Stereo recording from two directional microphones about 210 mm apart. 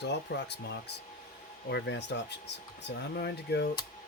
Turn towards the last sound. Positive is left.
turn(degrees=50)  # may be behind; listen again after turning